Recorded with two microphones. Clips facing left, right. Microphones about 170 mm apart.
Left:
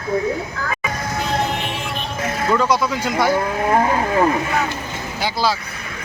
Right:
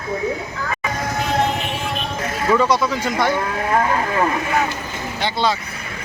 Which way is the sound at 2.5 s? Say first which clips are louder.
Right 1 dB; centre (ahead or behind).